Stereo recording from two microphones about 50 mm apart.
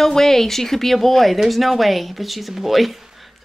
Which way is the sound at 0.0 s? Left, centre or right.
Centre.